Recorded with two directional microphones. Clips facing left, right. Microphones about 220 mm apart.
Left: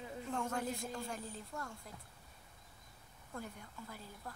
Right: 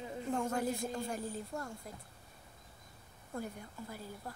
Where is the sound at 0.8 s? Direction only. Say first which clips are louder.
Right 5 dB; 30° right (ahead or behind).